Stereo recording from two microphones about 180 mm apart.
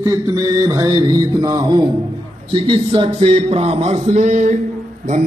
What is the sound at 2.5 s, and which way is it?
Speech, 30° right (ahead or behind).